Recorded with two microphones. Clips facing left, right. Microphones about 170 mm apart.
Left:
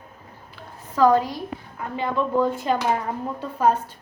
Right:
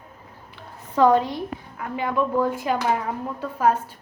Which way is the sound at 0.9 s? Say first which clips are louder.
Even; 25° right (ahead or behind).